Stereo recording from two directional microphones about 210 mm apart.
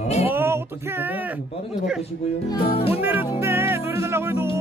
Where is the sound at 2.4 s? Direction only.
25° left (ahead or behind).